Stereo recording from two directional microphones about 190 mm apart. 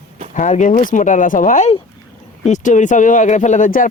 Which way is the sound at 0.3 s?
40° left (ahead or behind).